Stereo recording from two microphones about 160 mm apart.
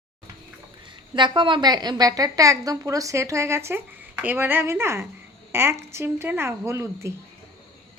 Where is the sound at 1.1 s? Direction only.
30° right (ahead or behind).